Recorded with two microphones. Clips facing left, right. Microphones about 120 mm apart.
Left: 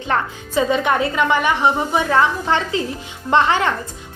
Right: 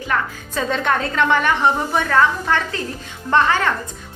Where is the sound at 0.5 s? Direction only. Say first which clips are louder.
Left 3 dB; 10° left (ahead or behind).